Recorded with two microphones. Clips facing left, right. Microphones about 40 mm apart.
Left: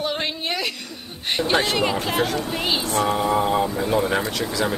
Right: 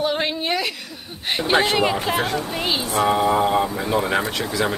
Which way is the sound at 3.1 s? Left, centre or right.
Centre.